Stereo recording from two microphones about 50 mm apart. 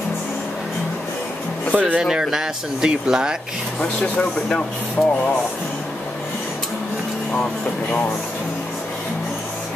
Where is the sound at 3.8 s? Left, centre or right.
Left.